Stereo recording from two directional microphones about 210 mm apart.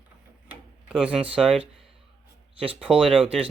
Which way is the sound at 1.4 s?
5° right (ahead or behind).